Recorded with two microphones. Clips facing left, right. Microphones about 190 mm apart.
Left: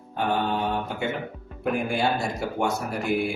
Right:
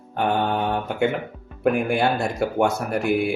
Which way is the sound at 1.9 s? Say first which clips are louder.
Right 4 dB; 60° right (ahead or behind).